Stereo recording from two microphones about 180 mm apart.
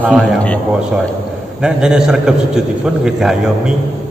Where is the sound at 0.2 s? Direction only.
5° left (ahead or behind).